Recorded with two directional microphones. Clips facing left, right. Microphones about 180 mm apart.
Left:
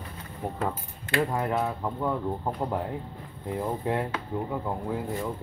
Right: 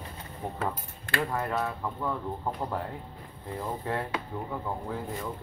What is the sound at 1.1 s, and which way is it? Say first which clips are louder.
Speech: left 4 dB; 15° left (ahead or behind).